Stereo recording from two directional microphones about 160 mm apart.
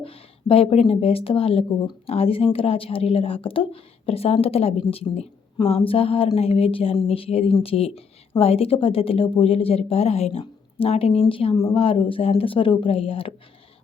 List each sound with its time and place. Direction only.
0.0 s a woman's voice: 35° left (ahead or behind)